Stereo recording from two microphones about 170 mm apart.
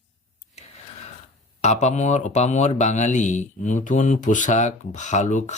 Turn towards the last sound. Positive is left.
turn(degrees=45)  # may be behind; listen again after turning